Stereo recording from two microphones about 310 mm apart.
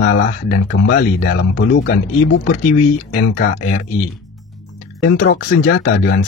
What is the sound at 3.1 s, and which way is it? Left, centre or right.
Speech, left.